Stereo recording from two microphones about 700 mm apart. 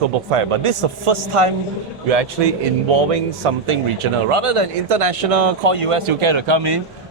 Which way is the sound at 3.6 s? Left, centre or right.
Right.